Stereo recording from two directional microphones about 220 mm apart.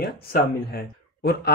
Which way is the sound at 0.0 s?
45° left (ahead or behind).